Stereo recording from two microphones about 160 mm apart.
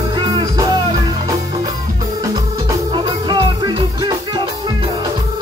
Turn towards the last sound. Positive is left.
turn(degrees=-30)  # may be behind; listen again after turning